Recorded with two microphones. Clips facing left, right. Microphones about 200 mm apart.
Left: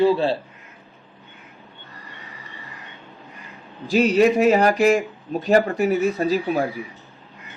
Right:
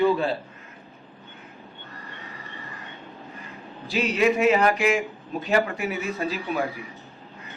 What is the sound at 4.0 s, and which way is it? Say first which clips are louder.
A man's voice: left 6 dB; 40° left (ahead or behind).